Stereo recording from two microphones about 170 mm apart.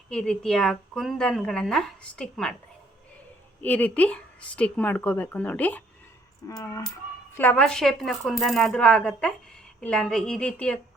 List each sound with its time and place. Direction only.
0.1 s a woman's voice: 5° left (ahead or behind)
3.6 s speech: 10° left (ahead or behind)
6.5 s speech: 20° left (ahead or behind)
7.3 s a woman's voice: 10° left (ahead or behind)